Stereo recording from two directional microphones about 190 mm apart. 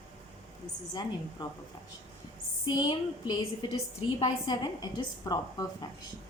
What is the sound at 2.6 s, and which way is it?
A woman's voice, 20° left (ahead or behind).